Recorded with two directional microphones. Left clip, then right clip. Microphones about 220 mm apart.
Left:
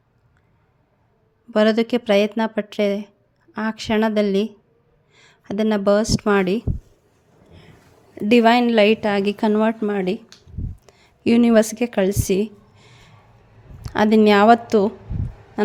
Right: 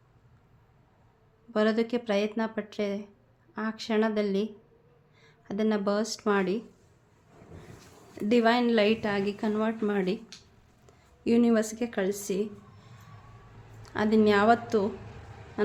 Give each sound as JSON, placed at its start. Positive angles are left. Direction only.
{"t": 1.5, "sound": "a woman's voice", "side_deg": 35}
{"t": 8.3, "sound": "a woman's voice", "side_deg": 35}
{"t": 15.6, "sound": "a sound", "side_deg": 35}